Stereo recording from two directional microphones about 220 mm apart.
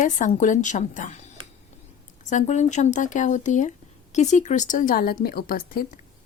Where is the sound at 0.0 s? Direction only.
35° left (ahead or behind).